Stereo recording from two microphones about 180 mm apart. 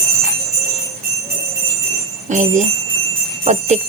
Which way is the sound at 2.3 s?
45° right (ahead or behind).